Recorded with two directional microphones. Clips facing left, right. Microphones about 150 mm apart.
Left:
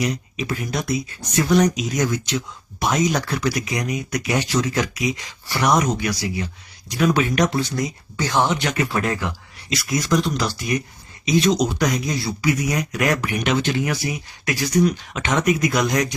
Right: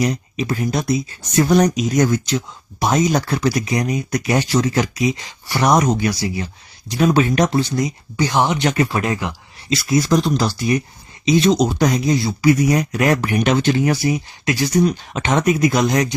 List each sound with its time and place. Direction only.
0.0 s speech: 35° right (ahead or behind); by 9.3 s 20° right (ahead or behind)
9.6 s speech: 30° right (ahead or behind)
12.4 s speech: 35° right (ahead or behind)